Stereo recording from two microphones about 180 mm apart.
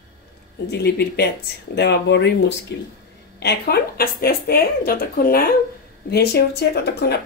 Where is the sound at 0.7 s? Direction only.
65° left (ahead or behind).